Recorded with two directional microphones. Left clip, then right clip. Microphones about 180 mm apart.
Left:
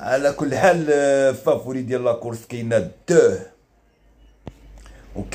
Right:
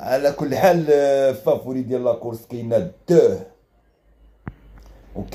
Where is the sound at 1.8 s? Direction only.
15° left (ahead or behind).